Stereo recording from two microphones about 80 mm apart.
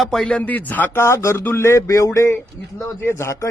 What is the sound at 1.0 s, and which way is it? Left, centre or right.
Speech, left.